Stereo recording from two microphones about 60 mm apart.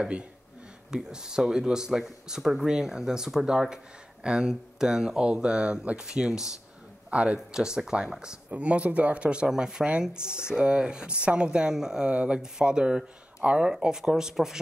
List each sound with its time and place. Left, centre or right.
0.0 s speech: centre